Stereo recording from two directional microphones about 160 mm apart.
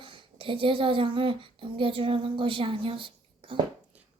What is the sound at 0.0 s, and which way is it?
Speech, 35° right (ahead or behind).